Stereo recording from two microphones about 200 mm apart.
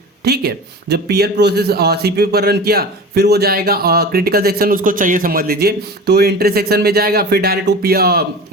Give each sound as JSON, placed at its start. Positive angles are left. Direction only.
{"t": 0.3, "sound": "a man's voice", "side_deg": -50}